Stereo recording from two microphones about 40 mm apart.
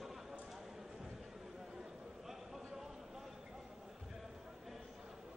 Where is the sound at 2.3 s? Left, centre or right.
Centre.